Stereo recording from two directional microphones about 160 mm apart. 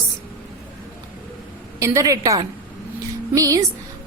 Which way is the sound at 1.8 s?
20° right (ahead or behind).